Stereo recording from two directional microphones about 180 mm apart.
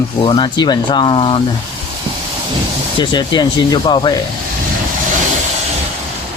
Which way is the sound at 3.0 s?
25° left (ahead or behind).